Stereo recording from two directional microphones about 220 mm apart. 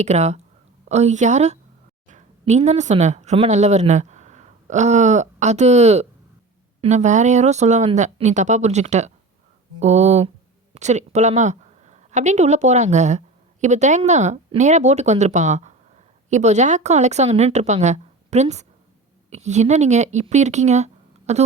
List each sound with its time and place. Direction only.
0.0 s a woman's voice: 30° right (ahead or behind)